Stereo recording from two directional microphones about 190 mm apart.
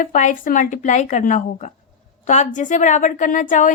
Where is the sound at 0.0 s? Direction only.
40° left (ahead or behind).